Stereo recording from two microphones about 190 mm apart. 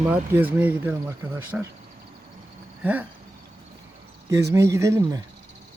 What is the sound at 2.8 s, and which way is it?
Speech, 10° right (ahead or behind).